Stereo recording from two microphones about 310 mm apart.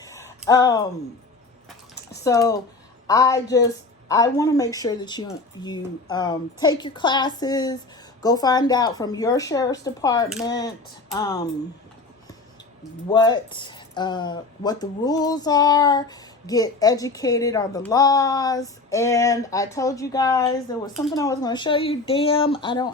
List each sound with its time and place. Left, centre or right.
0.0 s a sound: centre
0.4 s speech: centre
2.2 s speech: centre
13.1 s speech: centre